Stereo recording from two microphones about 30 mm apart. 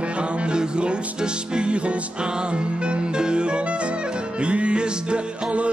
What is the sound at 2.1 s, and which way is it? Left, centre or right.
Music, right.